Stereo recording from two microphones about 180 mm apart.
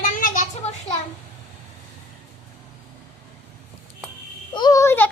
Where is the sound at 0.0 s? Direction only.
50° left (ahead or behind).